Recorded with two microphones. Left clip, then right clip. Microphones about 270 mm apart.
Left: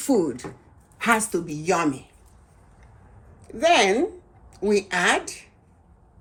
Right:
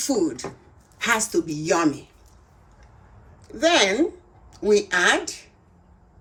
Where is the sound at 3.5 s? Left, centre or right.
Centre.